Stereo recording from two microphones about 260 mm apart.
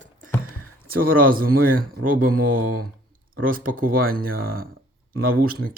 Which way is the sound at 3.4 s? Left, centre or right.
Right.